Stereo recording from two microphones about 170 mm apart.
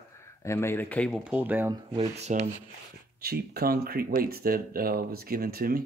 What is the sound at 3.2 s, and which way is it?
Speech, 65° right (ahead or behind).